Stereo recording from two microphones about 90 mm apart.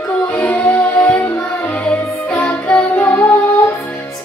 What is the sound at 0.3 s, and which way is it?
Music, 20° left (ahead or behind).